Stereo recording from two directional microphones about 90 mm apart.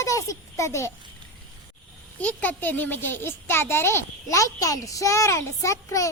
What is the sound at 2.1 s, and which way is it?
A child's voice, 15° left (ahead or behind).